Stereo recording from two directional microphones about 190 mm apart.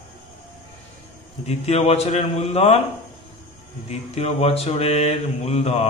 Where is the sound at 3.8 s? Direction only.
35° left (ahead or behind).